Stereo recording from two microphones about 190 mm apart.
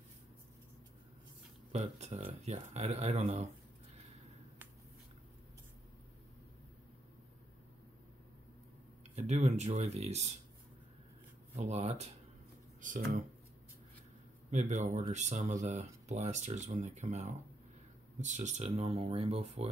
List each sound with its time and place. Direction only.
1.7 s speech: 35° right (ahead or behind)
9.1 s speech: 35° right (ahead or behind)
11.5 s speech: 35° right (ahead or behind)
14.5 s speech: 40° right (ahead or behind)